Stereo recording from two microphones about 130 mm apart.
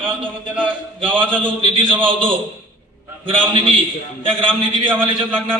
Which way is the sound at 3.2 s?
45° right (ahead or behind).